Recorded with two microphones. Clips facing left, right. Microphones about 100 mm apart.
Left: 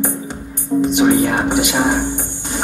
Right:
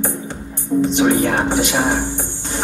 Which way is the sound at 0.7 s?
20° left (ahead or behind).